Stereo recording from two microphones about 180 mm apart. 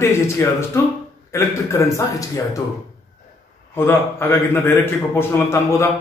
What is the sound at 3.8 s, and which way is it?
A man's voice, 10° left (ahead or behind).